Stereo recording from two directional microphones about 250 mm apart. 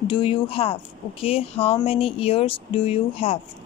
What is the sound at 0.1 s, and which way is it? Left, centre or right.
Speech, left.